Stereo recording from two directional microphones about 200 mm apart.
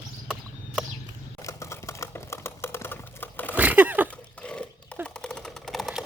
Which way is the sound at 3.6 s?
10° right (ahead or behind).